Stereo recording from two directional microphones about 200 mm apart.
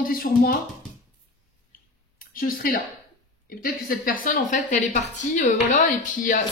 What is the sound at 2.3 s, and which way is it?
A woman's voice, 45° left (ahead or behind).